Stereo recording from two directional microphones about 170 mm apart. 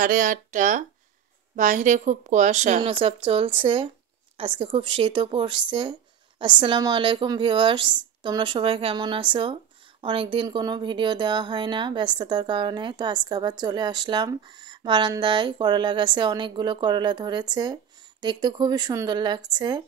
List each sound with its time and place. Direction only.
0.0 s a woman's voice: 55° right (ahead or behind); by 19.8 s 25° right (ahead or behind)